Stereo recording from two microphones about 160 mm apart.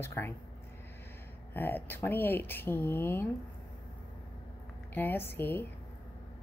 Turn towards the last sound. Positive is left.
turn(degrees=15)  # may be behind; listen again after turning